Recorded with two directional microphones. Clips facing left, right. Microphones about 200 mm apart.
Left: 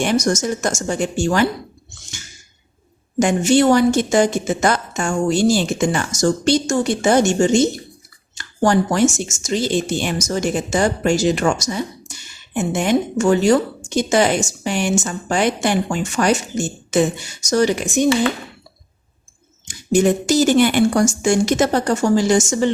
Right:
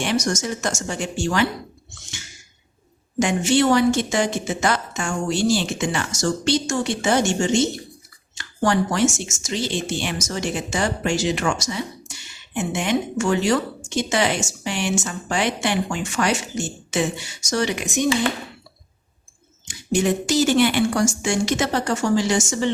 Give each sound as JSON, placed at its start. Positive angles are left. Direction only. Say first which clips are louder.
{"t": 0.0, "sound": "a woman's voice", "louder": "left 5 dB", "side_deg": 45}
{"t": 3.2, "sound": "a woman's voice", "louder": "left 4 dB", "side_deg": 45}
{"t": 20.0, "sound": "a woman's voice", "louder": "left 4 dB", "side_deg": 45}